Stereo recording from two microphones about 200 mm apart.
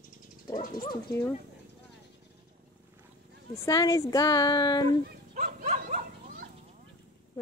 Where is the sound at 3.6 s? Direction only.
15° left (ahead or behind).